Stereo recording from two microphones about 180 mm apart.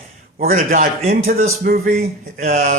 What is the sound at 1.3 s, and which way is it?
Speech, 55° right (ahead or behind).